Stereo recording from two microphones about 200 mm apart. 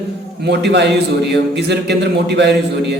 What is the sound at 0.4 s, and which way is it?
A man's voice, 60° right (ahead or behind).